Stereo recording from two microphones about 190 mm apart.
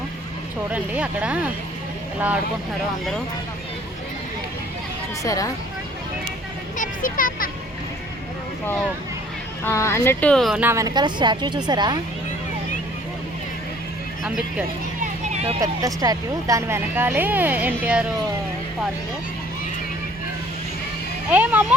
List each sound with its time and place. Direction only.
0.7 s speech: 5° right (ahead or behind)
5.2 s a woman's voice: 15° left (ahead or behind)
6.7 s speech: 45° left (ahead or behind)
9.6 s speech: 15° left (ahead or behind); by 11.9 s 20° right (ahead or behind)
14.3 s speech: 5° right (ahead or behind)
15.0 s a sound: 35° right (ahead or behind)
15.6 s speech: 20° right (ahead or behind)
21.2 s speech: 10° right (ahead or behind)